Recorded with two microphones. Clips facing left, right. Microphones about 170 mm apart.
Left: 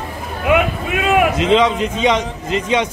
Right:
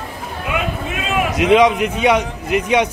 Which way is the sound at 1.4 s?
10° right (ahead or behind).